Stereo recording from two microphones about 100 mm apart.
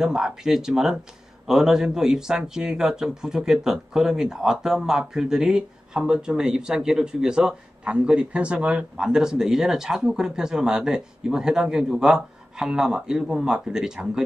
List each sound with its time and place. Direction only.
0.0 s speech: 5° right (ahead or behind)